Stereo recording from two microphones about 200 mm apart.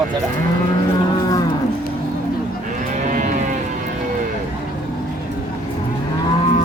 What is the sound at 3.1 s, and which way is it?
Cattle, 40° right (ahead or behind).